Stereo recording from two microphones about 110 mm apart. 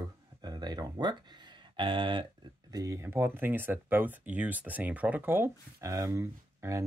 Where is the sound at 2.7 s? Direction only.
30° right (ahead or behind).